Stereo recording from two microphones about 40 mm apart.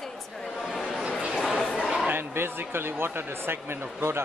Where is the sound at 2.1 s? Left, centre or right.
Right.